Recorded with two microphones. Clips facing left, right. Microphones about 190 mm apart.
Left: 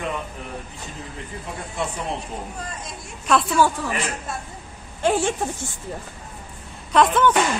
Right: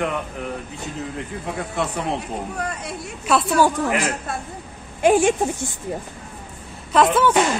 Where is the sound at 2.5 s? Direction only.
65° right (ahead or behind).